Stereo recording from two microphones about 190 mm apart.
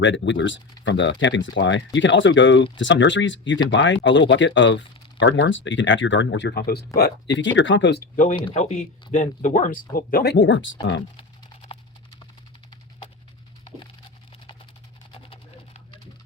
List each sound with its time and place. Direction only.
0.0 s speech: 70° left (ahead or behind)
8.1 s speech: 40° left (ahead or behind); by 10.7 s 70° left (ahead or behind)
11.2 s typing: 30° left (ahead or behind)